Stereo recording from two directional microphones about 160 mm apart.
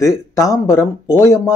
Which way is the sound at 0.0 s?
20° left (ahead or behind).